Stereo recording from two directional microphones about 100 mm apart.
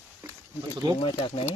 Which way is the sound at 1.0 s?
60° left (ahead or behind).